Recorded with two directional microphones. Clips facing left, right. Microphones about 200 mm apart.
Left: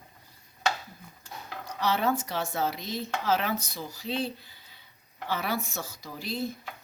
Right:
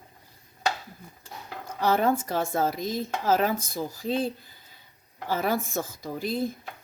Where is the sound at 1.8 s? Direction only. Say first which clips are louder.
Right 4 dB; 50° right (ahead or behind).